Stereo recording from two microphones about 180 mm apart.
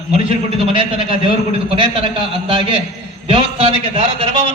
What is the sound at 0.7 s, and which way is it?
A man's voice, 30° right (ahead or behind).